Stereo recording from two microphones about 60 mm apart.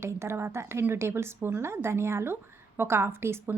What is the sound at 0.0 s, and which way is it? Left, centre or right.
A woman's voice, right.